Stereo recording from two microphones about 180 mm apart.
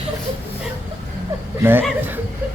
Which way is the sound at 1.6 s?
10° right (ahead or behind).